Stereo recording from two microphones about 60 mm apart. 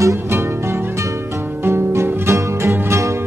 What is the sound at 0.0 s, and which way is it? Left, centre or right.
Music, right.